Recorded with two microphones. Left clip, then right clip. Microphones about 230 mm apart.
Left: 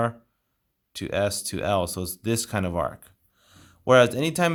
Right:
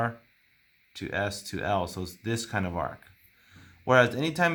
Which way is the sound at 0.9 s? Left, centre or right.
Left.